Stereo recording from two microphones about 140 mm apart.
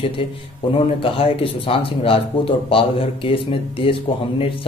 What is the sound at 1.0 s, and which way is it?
Speech, 40° left (ahead or behind).